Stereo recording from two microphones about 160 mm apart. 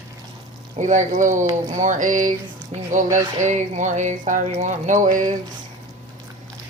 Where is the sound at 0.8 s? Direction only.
50° right (ahead or behind).